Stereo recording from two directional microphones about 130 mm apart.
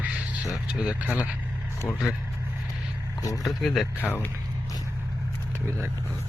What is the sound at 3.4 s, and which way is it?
Speech, centre (ahead or behind).